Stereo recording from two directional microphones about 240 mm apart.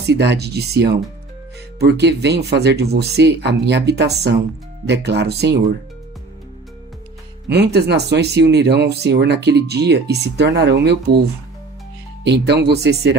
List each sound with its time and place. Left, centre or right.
0.0 s speech: right
7.4 s speech: right
12.2 s speech: right